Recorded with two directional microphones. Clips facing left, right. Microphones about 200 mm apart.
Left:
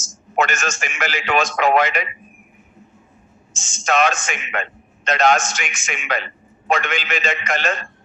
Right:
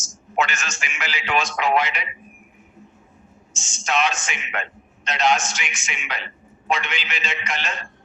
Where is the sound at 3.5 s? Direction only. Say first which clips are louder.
Left 4 dB; 45° left (ahead or behind).